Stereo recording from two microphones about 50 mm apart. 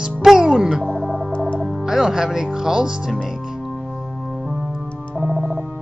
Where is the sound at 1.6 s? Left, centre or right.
Centre.